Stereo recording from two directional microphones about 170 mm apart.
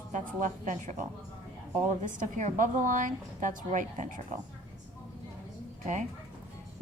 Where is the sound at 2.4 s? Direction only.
50° right (ahead or behind).